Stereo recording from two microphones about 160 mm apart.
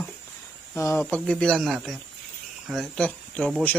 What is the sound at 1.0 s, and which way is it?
Speech, 5° left (ahead or behind).